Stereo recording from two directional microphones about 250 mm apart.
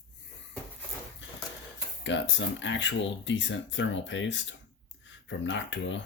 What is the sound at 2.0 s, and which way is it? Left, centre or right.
Speech, left.